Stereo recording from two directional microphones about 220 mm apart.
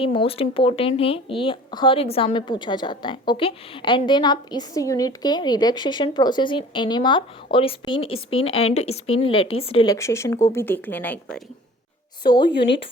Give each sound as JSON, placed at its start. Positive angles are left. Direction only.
{"t": 0.0, "sound": "a woman's voice", "side_deg": 25}
{"t": 12.5, "sound": "a woman's voice", "side_deg": 50}